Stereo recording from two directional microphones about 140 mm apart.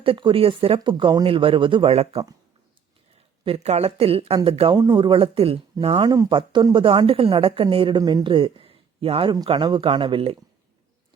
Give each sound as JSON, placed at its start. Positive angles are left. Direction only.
{"t": 0.0, "sound": "a woman's voice", "side_deg": -40}
{"t": 3.4, "sound": "a woman's voice", "side_deg": -50}
{"t": 4.8, "sound": "a woman's voice", "side_deg": -30}
{"t": 6.1, "sound": "a woman's voice", "side_deg": -30}